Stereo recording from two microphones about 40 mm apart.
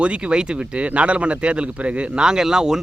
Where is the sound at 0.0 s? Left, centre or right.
Right.